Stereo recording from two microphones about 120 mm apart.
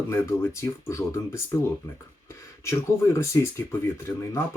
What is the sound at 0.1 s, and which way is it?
A man's voice, 20° left (ahead or behind).